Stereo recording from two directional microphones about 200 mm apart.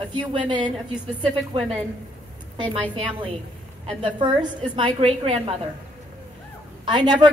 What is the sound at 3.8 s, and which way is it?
A woman's voice, 25° right (ahead or behind).